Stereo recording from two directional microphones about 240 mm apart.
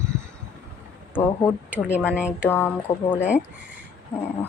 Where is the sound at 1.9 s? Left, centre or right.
Centre.